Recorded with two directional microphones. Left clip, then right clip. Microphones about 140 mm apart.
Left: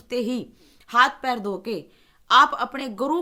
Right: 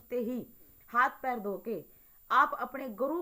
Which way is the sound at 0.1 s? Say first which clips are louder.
Left 8 dB; 35° left (ahead or behind).